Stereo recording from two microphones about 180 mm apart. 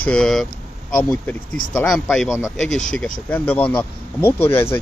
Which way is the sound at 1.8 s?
Centre (ahead or behind).